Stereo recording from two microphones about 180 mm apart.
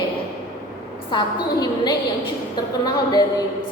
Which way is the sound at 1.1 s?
25° left (ahead or behind).